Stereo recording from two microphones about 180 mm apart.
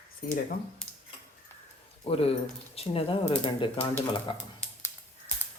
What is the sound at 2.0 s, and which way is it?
Speech, 35° left (ahead or behind).